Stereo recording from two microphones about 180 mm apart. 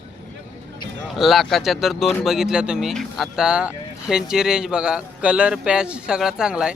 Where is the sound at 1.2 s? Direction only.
Centre (ahead or behind).